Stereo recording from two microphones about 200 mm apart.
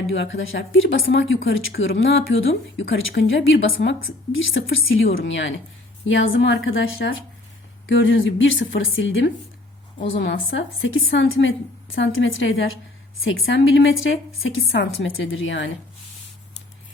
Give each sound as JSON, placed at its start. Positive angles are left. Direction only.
{"t": 0.1, "sound": "a woman's voice", "side_deg": 70}
{"t": 1.7, "sound": "speech", "side_deg": 50}
{"t": 2.0, "sound": "a woman's voice", "side_deg": 70}
{"t": 10.2, "sound": "a woman's voice", "side_deg": 60}